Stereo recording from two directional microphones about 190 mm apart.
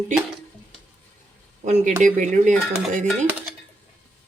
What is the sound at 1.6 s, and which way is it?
Speech, 40° right (ahead or behind).